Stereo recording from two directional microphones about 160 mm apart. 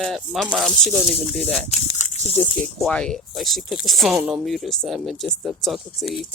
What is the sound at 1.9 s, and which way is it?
Snake, 45° left (ahead or behind).